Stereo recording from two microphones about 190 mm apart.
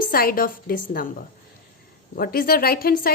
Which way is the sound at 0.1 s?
50° left (ahead or behind).